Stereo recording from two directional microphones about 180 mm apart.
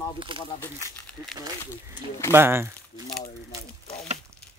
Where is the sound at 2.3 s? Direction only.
15° right (ahead or behind).